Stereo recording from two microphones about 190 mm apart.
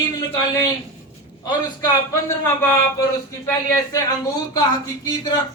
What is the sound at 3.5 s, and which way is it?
Speech, 20° left (ahead or behind).